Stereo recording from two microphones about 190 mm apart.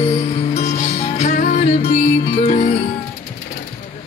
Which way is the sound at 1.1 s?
40° left (ahead or behind).